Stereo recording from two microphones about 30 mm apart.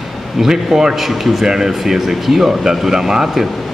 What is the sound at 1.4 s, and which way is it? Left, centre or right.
Speech, centre.